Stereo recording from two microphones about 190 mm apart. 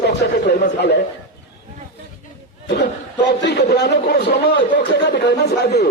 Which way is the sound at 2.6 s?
65° left (ahead or behind).